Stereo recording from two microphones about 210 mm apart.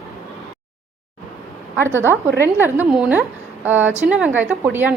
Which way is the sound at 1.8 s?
10° left (ahead or behind).